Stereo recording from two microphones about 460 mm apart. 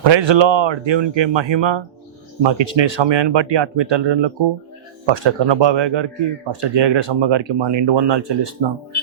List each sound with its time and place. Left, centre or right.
0.0 s speech: right